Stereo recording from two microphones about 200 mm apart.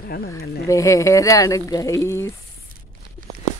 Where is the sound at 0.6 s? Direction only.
15° left (ahead or behind).